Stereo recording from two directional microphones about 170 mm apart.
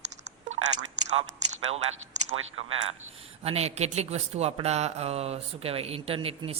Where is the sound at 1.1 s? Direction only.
40° right (ahead or behind).